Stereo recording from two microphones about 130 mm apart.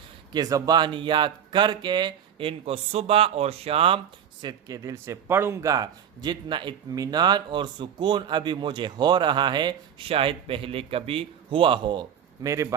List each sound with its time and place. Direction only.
0.3 s a man's voice: 25° right (ahead or behind)
4.8 s a man's voice: 20° right (ahead or behind)